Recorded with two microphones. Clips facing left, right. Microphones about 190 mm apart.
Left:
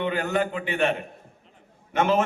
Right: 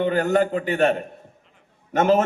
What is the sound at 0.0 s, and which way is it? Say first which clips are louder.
A man's voice: right 5 dB; 40° right (ahead or behind).